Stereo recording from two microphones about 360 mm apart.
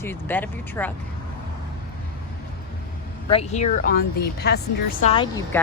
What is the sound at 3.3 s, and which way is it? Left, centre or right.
Speech, centre.